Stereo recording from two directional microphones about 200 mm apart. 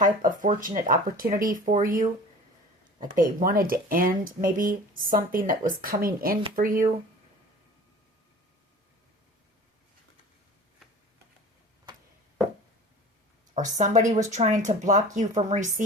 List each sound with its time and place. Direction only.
0.0 s speech: 40° right (ahead or behind)
13.6 s speech: 40° right (ahead or behind)